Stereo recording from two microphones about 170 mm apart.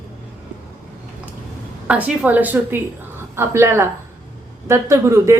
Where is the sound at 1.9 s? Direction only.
10° right (ahead or behind).